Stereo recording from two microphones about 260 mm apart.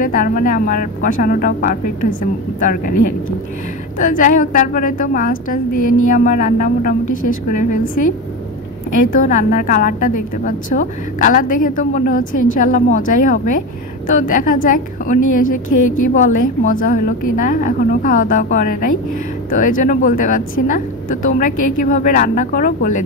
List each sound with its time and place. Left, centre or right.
0.0 s a woman's voice: left
2.9 s speech: left
4.0 s a woman's voice: left
5.7 s speech: left
6.0 s a woman's voice: left
15.1 s speech: left
16.1 s a woman's voice: left
21.5 s speech: left
21.8 s a woman's voice: left